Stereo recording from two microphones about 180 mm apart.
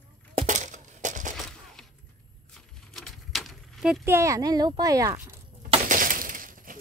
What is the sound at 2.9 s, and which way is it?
Keys jangling, centre (ahead or behind).